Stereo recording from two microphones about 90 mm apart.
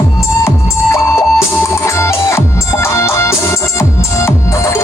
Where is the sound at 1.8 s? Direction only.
30° left (ahead or behind).